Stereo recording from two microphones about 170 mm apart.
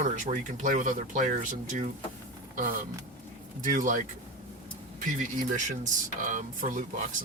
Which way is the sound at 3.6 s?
50° right (ahead or behind).